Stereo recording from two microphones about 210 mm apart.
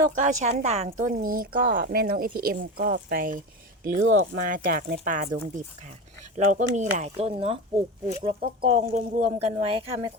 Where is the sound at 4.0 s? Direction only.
70° right (ahead or behind).